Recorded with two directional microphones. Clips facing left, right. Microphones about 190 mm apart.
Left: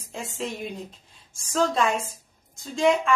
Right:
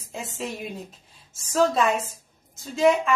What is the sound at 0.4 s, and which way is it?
A woman's voice, 5° right (ahead or behind).